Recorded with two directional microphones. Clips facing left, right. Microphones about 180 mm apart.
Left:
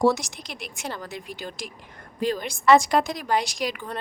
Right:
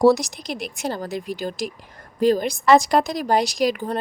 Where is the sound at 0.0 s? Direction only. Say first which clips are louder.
Right 6 dB; 35° right (ahead or behind).